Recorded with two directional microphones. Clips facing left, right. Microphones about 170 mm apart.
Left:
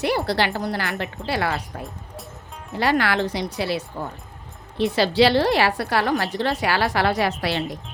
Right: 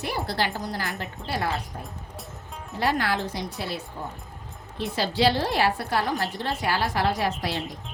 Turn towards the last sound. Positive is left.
turn(degrees=75)  # may be behind; listen again after turning